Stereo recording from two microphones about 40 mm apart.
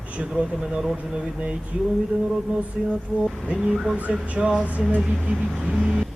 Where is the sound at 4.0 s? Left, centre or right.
Right.